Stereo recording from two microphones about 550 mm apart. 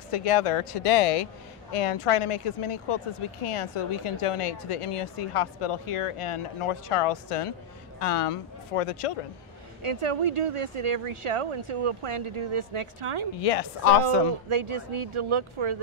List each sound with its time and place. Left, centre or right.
0.1 s speech: left
9.8 s speech: right
13.4 s a woman's voice: left
14.0 s speech: right